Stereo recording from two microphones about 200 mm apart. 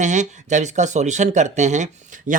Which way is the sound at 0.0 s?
35° right (ahead or behind).